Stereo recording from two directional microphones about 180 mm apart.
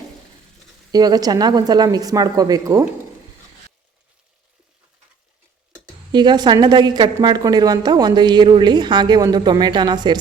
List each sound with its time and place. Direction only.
0.9 s a woman's voice: 20° right (ahead or behind)
5.7 s a woman's voice: 25° right (ahead or behind)